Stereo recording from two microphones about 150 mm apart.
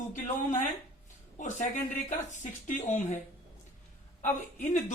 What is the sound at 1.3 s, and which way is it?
A woman's voice, 60° left (ahead or behind).